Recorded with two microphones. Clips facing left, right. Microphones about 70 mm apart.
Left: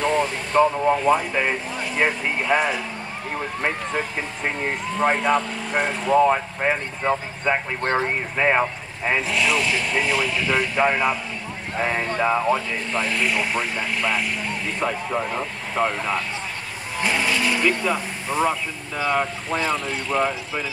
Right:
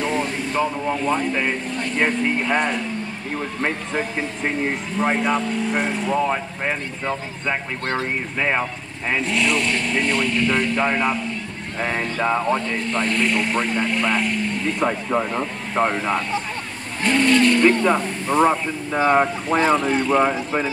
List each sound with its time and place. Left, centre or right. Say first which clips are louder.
0.0 s vehicle: left 1 dB; centre
1.0 s speech: left 1 dB; centre
4.6 s speech: left 3 dB; centre
7.8 s speech: left 3 dB; left
8.4 s speech: left 3 dB; centre
14.9 s speech: right 3 dB; centre
18.5 s speech: right 5 dB; right
19.5 s speech: right 7 dB; centre